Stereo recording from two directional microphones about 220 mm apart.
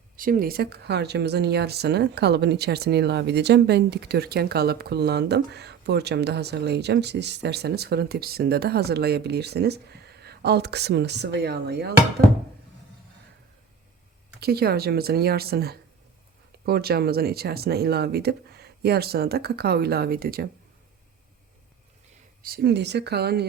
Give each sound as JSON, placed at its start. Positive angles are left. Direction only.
{"t": 0.2, "sound": "speech", "side_deg": -40}
{"t": 14.3, "sound": "speech", "side_deg": -45}
{"t": 22.4, "sound": "speech", "side_deg": -45}